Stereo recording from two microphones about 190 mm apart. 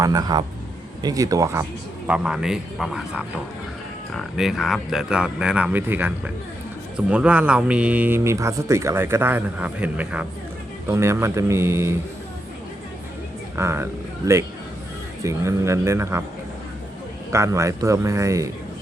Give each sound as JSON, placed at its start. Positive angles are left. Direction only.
{"t": 0.0, "sound": "a man's voice", "side_deg": -20}
{"t": 2.0, "sound": "speech", "side_deg": -5}
{"t": 13.6, "sound": "speech", "side_deg": -15}
{"t": 17.3, "sound": "speech", "side_deg": -15}